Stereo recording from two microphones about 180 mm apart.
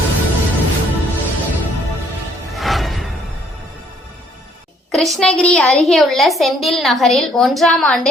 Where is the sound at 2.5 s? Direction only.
Centre (ahead or behind).